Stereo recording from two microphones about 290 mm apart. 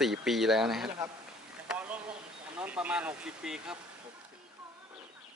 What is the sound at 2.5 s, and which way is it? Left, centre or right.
Speech, centre.